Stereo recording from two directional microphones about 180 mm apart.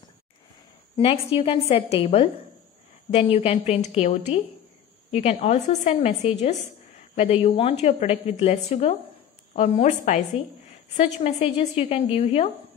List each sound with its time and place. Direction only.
0.9 s a woman's voice: 30° left (ahead or behind)